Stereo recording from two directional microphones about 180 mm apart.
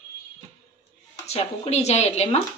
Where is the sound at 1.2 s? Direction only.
35° left (ahead or behind).